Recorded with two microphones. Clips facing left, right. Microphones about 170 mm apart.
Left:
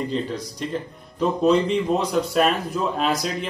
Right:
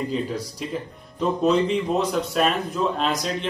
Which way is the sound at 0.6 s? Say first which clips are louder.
Left 2 dB; 5° right (ahead or behind).